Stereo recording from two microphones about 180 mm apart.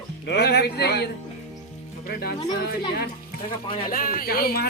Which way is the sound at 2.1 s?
60° left (ahead or behind).